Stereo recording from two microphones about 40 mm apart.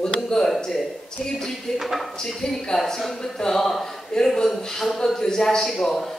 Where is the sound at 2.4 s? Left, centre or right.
Centre.